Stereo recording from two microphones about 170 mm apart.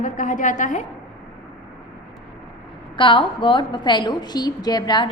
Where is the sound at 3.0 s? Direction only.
30° left (ahead or behind).